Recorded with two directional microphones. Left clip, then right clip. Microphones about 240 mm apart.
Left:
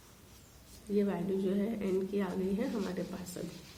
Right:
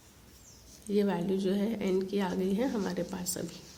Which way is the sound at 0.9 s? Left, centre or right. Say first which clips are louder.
Right 3 dB; right.